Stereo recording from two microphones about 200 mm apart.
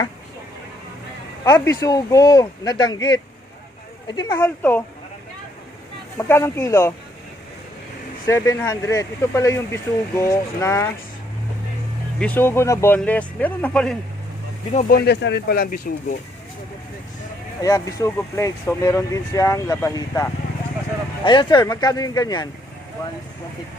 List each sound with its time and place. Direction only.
1.5 s speech: 15° left (ahead or behind)
4.4 s speech: 10° left (ahead or behind)
6.1 s speech: 15° left (ahead or behind)
8.3 s speech: 15° left (ahead or behind)
12.2 s speech: 10° left (ahead or behind)
14.7 s speech: 40° left (ahead or behind)
17.6 s speech: 15° left (ahead or behind)